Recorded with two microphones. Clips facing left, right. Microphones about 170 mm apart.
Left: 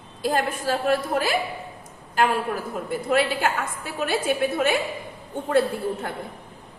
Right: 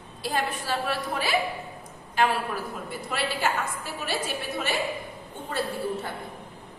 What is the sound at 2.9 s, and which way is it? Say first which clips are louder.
A woman's voice: left 10 dB; 55° left (ahead or behind).